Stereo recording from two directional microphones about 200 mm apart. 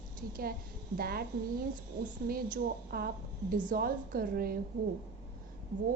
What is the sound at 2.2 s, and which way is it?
A woman's voice, 45° right (ahead or behind).